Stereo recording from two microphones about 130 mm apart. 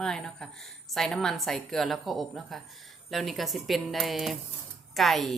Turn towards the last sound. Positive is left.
turn(degrees=0)  # may be behind; listen again after turning